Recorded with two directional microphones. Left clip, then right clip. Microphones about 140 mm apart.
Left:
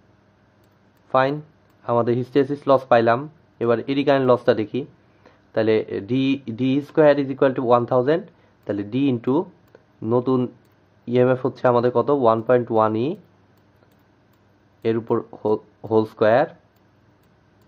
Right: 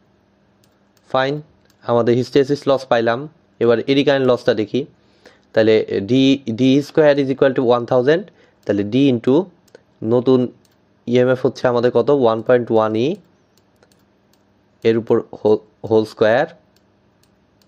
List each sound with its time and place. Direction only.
1.0 s a sound: 40° right (ahead or behind)
1.8 s speech: 40° right (ahead or behind)
14.8 s speech: 35° right (ahead or behind)